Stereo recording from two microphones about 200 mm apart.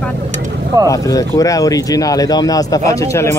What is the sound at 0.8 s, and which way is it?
Speech, 15° left (ahead or behind).